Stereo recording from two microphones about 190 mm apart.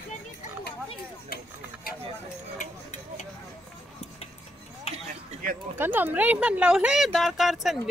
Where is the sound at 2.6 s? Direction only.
40° left (ahead or behind).